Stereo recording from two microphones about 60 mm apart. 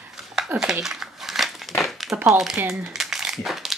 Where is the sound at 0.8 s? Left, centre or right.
Centre.